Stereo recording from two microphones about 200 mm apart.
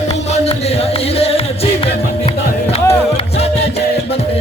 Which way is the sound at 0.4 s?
30° left (ahead or behind).